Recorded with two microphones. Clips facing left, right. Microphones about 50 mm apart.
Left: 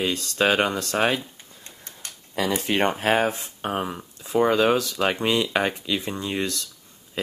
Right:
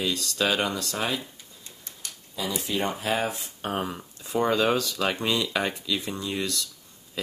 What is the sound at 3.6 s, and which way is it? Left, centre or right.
Speech, centre.